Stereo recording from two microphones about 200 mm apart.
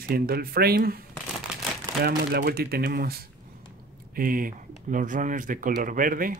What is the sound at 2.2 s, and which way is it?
Speech, 50° right (ahead or behind).